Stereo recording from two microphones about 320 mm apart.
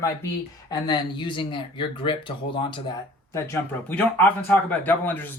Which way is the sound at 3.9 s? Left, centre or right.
Centre.